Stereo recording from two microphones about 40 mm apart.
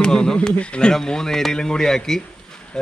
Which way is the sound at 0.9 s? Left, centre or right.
Centre.